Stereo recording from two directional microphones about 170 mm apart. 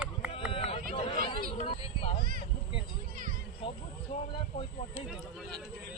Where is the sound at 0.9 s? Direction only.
35° left (ahead or behind).